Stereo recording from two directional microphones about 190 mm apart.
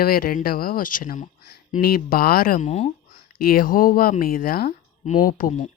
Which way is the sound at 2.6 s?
35° left (ahead or behind).